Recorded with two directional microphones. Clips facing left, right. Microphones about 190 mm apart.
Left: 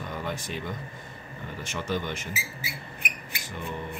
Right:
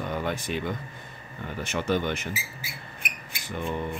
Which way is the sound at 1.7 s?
65° right (ahead or behind).